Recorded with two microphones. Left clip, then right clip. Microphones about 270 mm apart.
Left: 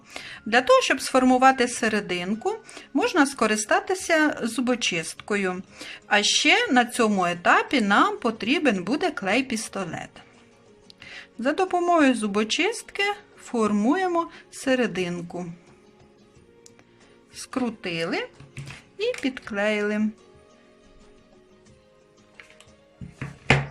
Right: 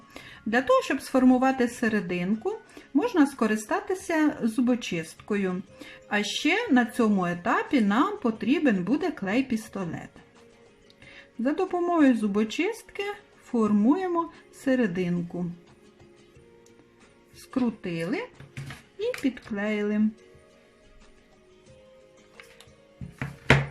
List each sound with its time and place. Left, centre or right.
0.1 s speech: left
17.3 s speech: left